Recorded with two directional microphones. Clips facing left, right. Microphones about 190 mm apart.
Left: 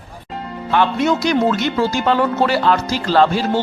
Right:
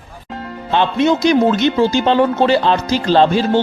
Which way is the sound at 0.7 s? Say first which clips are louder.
Right 2 dB; 20° right (ahead or behind).